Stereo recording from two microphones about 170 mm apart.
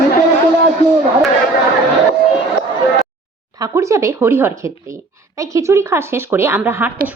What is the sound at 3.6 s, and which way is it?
A woman's voice, 20° right (ahead or behind).